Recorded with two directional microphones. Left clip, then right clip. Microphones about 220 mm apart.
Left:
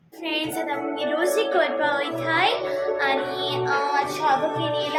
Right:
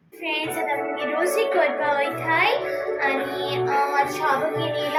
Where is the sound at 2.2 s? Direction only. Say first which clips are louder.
Right 1 dB; 15° left (ahead or behind).